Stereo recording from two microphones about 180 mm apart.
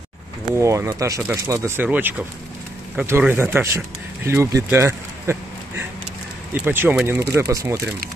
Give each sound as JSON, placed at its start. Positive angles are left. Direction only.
{"t": 0.6, "sound": "speech", "side_deg": -15}
{"t": 4.7, "sound": "a sound", "side_deg": -15}
{"t": 6.5, "sound": "speech", "side_deg": -10}